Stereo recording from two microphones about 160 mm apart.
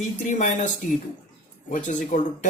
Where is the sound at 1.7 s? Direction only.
50° left (ahead or behind).